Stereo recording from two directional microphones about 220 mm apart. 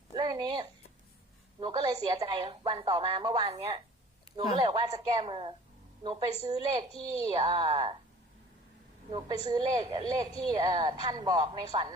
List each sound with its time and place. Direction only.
0.2 s a woman's voice: 20° right (ahead or behind)
9.5 s a woman's voice: 15° right (ahead or behind)